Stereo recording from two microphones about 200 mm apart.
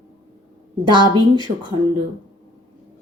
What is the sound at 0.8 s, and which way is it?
Speech, 25° right (ahead or behind).